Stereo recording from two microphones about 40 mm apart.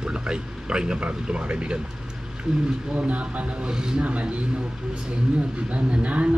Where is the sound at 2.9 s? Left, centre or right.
Right.